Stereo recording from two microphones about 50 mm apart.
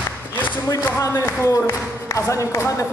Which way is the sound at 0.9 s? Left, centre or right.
Left.